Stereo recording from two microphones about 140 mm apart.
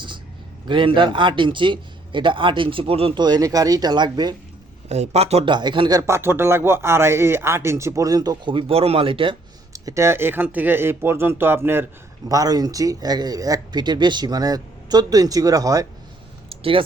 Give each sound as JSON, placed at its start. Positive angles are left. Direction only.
{"t": 0.7, "sound": "a man's voice", "side_deg": -35}
{"t": 3.2, "sound": "speech", "side_deg": -30}
{"t": 4.9, "sound": "speech", "side_deg": -50}
{"t": 5.5, "sound": "a man's voice", "side_deg": -35}
{"t": 6.0, "sound": "speech", "side_deg": -20}
{"t": 9.7, "sound": "speech", "side_deg": -20}
{"t": 12.3, "sound": "speech", "side_deg": -25}
{"t": 16.5, "sound": "a sound", "side_deg": -40}